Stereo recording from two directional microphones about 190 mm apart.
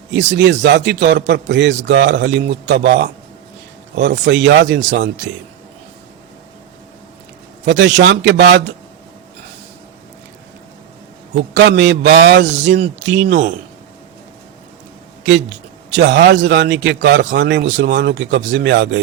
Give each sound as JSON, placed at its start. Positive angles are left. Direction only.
{"t": 0.1, "sound": "a man's voice", "side_deg": -70}
{"t": 7.6, "sound": "a man's voice", "side_deg": -70}
{"t": 11.5, "sound": "a man's voice", "side_deg": -70}
{"t": 15.2, "sound": "a man's voice", "side_deg": -75}